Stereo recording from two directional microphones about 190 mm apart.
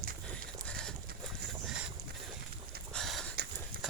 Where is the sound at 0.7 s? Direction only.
5° left (ahead or behind).